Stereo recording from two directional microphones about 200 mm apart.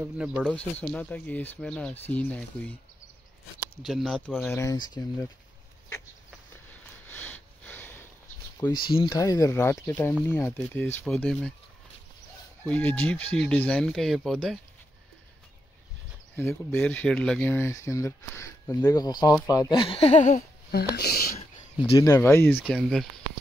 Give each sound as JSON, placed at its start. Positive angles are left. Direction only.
{"t": 0.0, "sound": "speech", "side_deg": -5}
{"t": 0.4, "sound": "speech", "side_deg": 5}
{"t": 3.8, "sound": "speech", "side_deg": 0}
{"t": 4.5, "sound": "speech", "side_deg": 15}
{"t": 6.7, "sound": "sniff", "side_deg": 10}
{"t": 8.8, "sound": "speech", "side_deg": 25}
{"t": 12.6, "sound": "speech", "side_deg": 10}
{"t": 16.3, "sound": "speech", "side_deg": 10}
{"t": 20.9, "sound": "speech", "side_deg": 50}
{"t": 22.0, "sound": "speech", "side_deg": 15}